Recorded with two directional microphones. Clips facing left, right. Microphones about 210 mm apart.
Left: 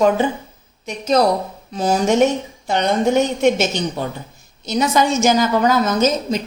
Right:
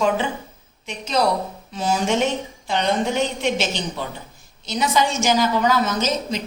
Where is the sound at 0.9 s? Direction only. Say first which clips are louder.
Left 5 dB; 45° left (ahead or behind).